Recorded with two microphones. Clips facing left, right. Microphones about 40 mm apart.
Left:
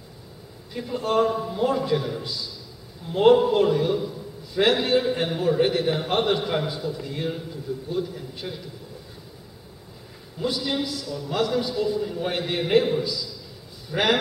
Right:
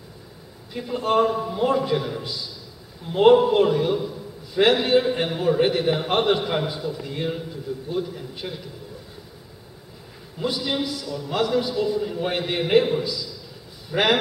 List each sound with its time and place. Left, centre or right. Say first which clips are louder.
0.7 s a man's voice: right 2 dB; centre
10.4 s a man's voice: right 1 dB; centre